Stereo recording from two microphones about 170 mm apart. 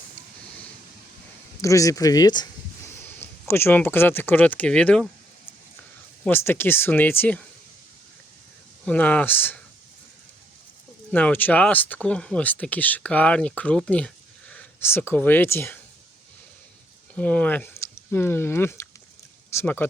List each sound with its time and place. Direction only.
1.6 s speech: 20° left (ahead or behind)
3.2 s speech: 15° left (ahead or behind)
6.2 s speech: 10° left (ahead or behind)
8.8 s speech: 10° left (ahead or behind)
11.1 s speech: 10° left (ahead or behind)
17.2 s speech: 5° left (ahead or behind)